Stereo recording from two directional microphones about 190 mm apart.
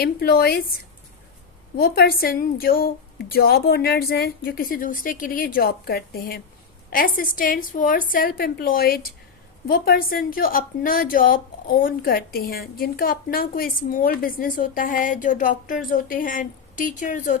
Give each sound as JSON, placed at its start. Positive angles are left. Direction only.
{"t": 0.0, "sound": "a woman's voice", "side_deg": 55}
{"t": 1.7, "sound": "a woman's voice", "side_deg": 50}